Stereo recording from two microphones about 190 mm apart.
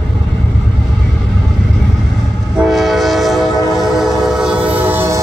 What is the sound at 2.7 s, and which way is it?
Train, centre (ahead or behind).